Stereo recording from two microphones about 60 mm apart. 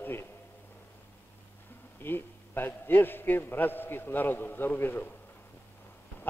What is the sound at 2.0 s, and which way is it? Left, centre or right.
A man's voice, left.